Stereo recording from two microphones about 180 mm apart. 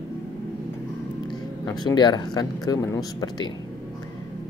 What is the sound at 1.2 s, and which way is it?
Speech, 25° left (ahead or behind).